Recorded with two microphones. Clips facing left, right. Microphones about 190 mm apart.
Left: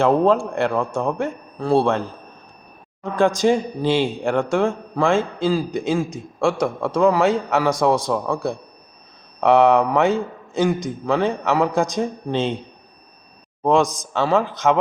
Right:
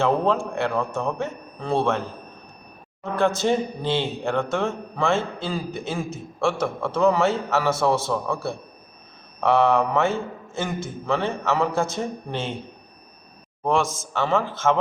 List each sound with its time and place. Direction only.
0.3 s a man's voice: 15° left (ahead or behind)
3.0 s a man's voice: 15° left (ahead or behind)
13.7 s a man's voice: 15° left (ahead or behind)